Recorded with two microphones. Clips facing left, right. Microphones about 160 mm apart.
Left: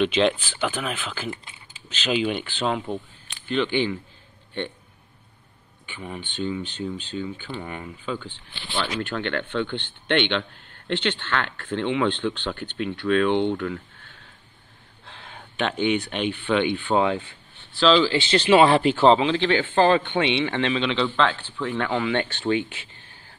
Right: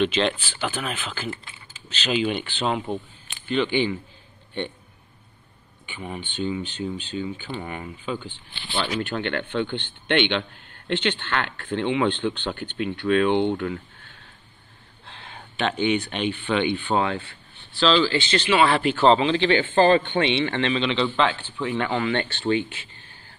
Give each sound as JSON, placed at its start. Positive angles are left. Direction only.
{"t": 0.0, "sound": "a man's voice", "side_deg": 10}
{"t": 5.9, "sound": "speech", "side_deg": -10}
{"t": 15.0, "sound": "a sound", "side_deg": 10}
{"t": 15.3, "sound": "a man's voice", "side_deg": 0}
{"t": 18.4, "sound": "speech", "side_deg": 30}
{"t": 19.0, "sound": "a man's voice", "side_deg": 5}